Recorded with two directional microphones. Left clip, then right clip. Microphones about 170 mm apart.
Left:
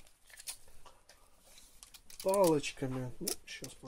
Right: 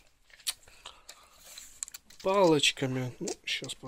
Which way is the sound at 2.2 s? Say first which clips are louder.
Right 5 dB; 10° right (ahead or behind).